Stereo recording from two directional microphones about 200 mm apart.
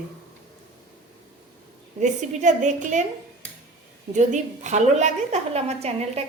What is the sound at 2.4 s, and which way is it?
Speech, 35° right (ahead or behind).